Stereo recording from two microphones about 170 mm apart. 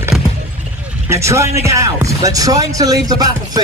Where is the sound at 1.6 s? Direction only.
20° right (ahead or behind).